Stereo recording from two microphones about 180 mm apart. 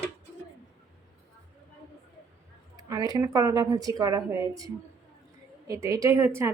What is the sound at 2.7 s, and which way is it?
A woman's voice, 20° right (ahead or behind).